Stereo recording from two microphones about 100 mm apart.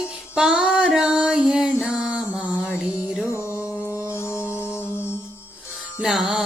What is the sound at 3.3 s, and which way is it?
Music, 30° left (ahead or behind).